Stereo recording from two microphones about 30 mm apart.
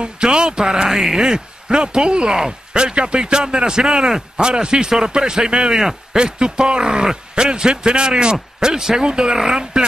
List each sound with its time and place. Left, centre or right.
0.0 s a man's voice: right
0.8 s a man's voice: centre
9.0 s speech: right
9.3 s a man's voice: right